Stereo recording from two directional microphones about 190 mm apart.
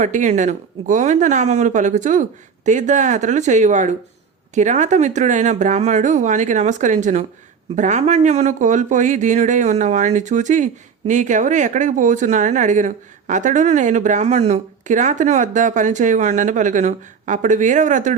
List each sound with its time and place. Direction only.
0.0 s speech: 40° right (ahead or behind)